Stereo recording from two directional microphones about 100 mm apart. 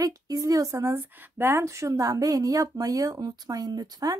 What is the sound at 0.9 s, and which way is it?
Speech, 25° right (ahead or behind).